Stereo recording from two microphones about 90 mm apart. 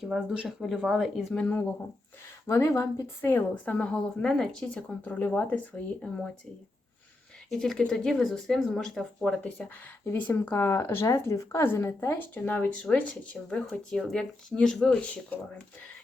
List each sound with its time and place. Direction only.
0.0 s speech: 5° right (ahead or behind)
1.3 s speech: 10° left (ahead or behind)
2.5 s speech: 35° left (ahead or behind)
3.2 s a woman's voice: 25° left (ahead or behind)
3.5 s speech: 15° left (ahead or behind)
7.5 s speech: 5° left (ahead or behind)